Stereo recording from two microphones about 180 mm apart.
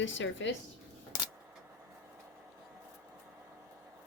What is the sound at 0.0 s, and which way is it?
Speech, 90° left.